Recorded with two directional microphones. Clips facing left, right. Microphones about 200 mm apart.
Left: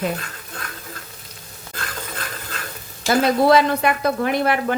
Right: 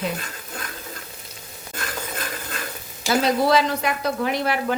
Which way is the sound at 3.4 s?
55° left (ahead or behind).